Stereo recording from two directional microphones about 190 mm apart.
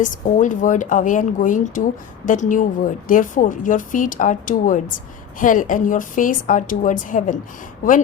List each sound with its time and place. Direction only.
0.0 s a woman's voice: 45° left (ahead or behind)